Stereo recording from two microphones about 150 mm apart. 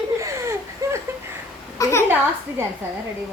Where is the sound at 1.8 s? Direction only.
20° left (ahead or behind).